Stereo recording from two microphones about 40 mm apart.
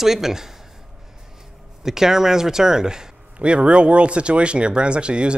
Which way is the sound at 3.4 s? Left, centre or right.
Right.